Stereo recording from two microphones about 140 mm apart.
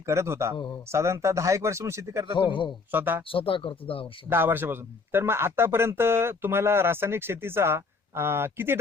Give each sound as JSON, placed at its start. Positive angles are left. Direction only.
{"t": 0.0, "sound": "speech", "side_deg": -20}
{"t": 0.5, "sound": "speech", "side_deg": 30}
{"t": 0.9, "sound": "speech", "side_deg": -20}
{"t": 2.4, "sound": "speech", "side_deg": 35}
{"t": 2.9, "sound": "speech", "side_deg": -15}
{"t": 3.2, "sound": "speech", "side_deg": 40}
{"t": 4.3, "sound": "speech", "side_deg": -15}